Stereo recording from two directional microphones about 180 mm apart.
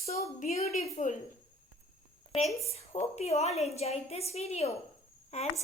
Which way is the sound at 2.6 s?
35° left (ahead or behind).